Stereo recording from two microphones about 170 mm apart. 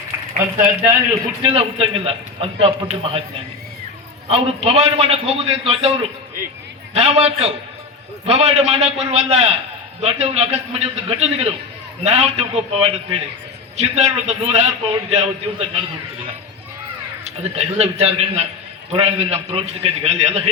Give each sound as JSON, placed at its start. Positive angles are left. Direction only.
{"t": 0.6, "sound": "a man's voice", "side_deg": -15}
{"t": 1.4, "sound": "a man's voice", "side_deg": -35}
{"t": 4.3, "sound": "a man's voice", "side_deg": -35}
{"t": 17.2, "sound": "a man's voice", "side_deg": -40}